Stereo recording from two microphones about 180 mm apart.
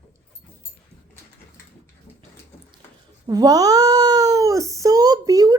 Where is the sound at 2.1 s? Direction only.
10° left (ahead or behind).